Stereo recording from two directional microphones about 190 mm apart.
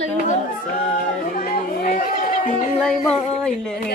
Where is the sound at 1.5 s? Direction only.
50° left (ahead or behind).